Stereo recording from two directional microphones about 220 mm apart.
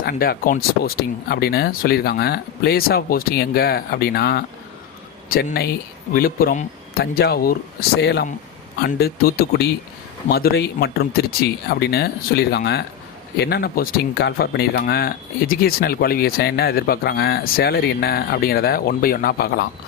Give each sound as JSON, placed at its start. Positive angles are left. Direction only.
{"t": 0.0, "sound": "speech", "side_deg": 45}